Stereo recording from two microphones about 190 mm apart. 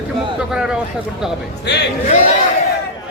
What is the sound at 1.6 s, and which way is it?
Speech, 60° left (ahead or behind).